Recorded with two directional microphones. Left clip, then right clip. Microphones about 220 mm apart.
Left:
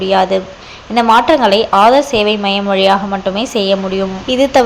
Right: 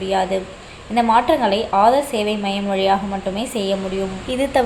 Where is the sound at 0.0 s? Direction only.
20° left (ahead or behind).